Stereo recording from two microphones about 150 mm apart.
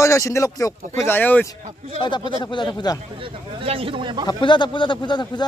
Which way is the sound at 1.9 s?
35° left (ahead or behind).